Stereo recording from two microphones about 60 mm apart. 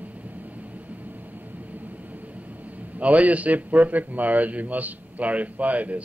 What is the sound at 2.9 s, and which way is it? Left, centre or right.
A man's voice, right.